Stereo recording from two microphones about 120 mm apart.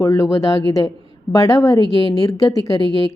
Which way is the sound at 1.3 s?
30° left (ahead or behind).